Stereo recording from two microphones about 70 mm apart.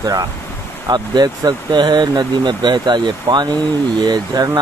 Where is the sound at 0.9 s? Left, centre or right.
Right.